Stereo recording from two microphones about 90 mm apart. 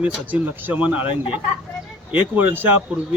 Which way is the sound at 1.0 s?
75° left (ahead or behind).